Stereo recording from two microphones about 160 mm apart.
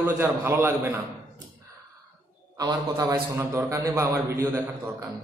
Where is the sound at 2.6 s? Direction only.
25° right (ahead or behind).